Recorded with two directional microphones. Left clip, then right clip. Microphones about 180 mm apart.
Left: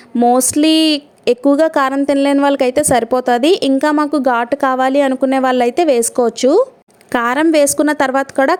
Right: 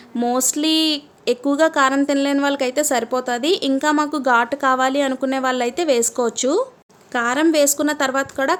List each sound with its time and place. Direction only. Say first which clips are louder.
0.3 s speech: left 6 dB; 40° left (ahead or behind)
7.1 s a woman's voice: left 5 dB; 50° left (ahead or behind)